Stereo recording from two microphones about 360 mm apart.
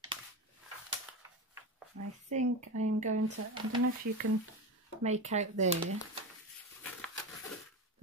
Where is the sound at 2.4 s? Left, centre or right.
Right.